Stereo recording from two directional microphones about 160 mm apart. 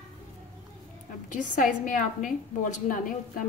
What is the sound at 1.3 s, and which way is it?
A woman's voice, 55° left (ahead or behind).